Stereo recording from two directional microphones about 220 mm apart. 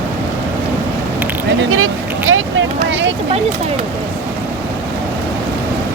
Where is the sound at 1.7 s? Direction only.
65° right (ahead or behind).